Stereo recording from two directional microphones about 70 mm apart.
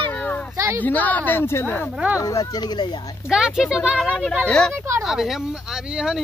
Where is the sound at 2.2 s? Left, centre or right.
Left.